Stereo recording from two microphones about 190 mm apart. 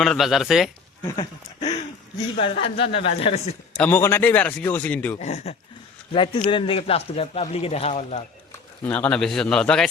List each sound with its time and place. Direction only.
0.0 s a man's voice: centre (ahead or behind)
1.0 s speech: 25° left (ahead or behind)
3.8 s a man's voice: 10° left (ahead or behind)
5.2 s a man's voice: 35° left (ahead or behind)
8.8 s a man's voice: 10° left (ahead or behind)